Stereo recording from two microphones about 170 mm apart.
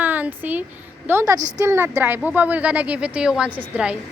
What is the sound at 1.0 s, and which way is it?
A woman's voice, 15° right (ahead or behind).